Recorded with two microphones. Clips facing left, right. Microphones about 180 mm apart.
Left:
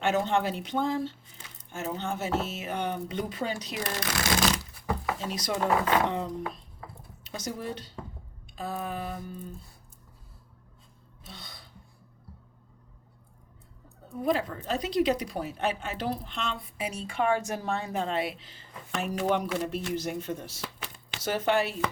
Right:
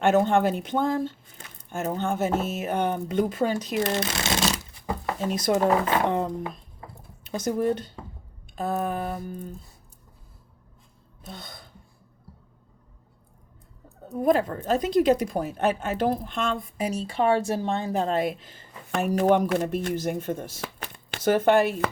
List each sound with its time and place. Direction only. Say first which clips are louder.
0.0 s speech: right 6 dB; 50° right (ahead or behind)
3.8 s speech: right 4 dB; 25° right (ahead or behind)
5.2 s speech: right 11 dB; 50° right (ahead or behind)
11.2 s throat clearing: right 6 dB; 50° right (ahead or behind)
14.1 s speech: right 6 dB; 50° right (ahead or behind)